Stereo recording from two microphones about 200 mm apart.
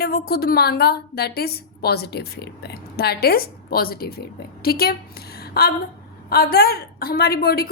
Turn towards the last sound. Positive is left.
turn(degrees=50)  # may be behind; listen again after turning